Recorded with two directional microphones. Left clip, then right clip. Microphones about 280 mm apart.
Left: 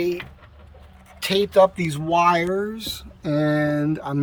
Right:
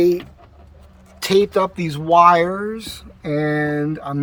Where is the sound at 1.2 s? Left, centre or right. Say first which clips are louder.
Even; centre.